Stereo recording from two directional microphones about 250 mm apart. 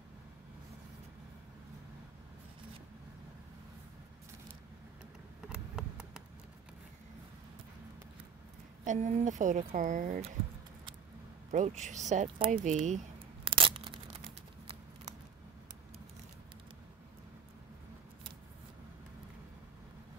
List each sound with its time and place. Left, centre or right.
5.5 s a sound: centre
8.8 s a woman's voice: right
11.5 s speech: right